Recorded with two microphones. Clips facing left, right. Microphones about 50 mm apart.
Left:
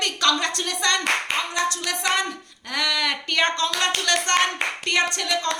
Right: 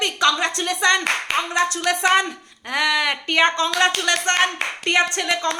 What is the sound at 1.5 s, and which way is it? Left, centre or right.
A woman's voice, right.